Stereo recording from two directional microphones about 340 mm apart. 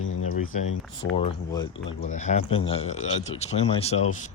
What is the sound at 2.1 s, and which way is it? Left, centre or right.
Speech, left.